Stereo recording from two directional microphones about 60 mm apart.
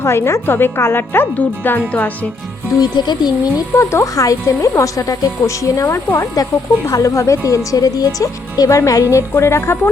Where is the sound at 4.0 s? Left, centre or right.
Left.